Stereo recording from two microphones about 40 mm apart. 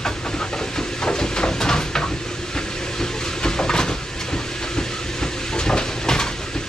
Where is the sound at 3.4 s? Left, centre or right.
Centre.